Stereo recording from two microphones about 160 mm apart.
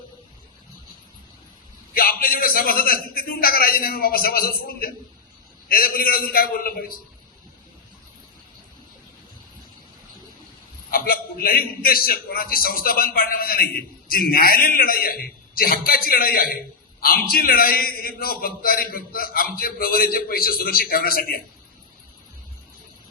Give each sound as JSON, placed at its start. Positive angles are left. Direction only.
{"t": 1.9, "sound": "a man's voice", "side_deg": 65}
{"t": 10.9, "sound": "a man's voice", "side_deg": 65}